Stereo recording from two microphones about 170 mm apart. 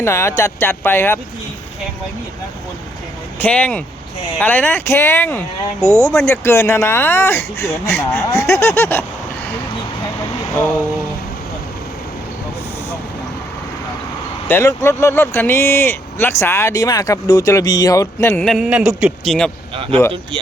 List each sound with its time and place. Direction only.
0.0 s speech: 15° left (ahead or behind)
3.3 s speech: 10° left (ahead or behind)
14.4 s speech: 15° left (ahead or behind)
19.7 s speech: 30° right (ahead or behind)